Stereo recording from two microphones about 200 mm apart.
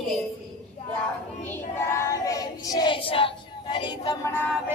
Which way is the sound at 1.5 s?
10° left (ahead or behind).